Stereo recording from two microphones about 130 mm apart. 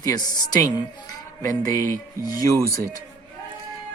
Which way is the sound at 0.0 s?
30° left (ahead or behind).